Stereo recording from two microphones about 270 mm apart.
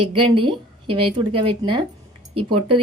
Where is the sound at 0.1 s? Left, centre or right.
Centre.